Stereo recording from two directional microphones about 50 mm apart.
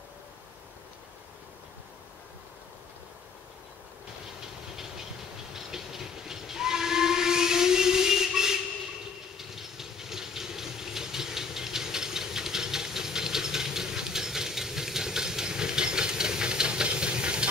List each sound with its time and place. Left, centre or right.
5.5 s steam whistle: centre
9.4 s steam: centre